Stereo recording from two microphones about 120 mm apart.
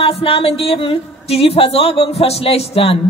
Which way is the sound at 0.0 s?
50° left (ahead or behind).